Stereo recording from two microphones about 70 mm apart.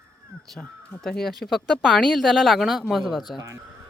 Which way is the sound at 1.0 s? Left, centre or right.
Centre.